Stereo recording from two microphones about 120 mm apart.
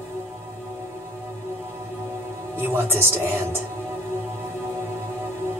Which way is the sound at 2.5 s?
20° right (ahead or behind).